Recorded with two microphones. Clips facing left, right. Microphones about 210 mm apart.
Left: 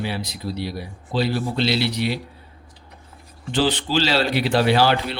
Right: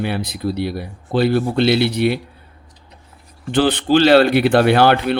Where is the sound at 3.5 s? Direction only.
55° right (ahead or behind).